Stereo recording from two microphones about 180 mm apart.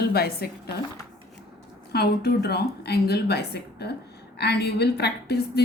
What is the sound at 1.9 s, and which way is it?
A woman's voice, 65° left (ahead or behind).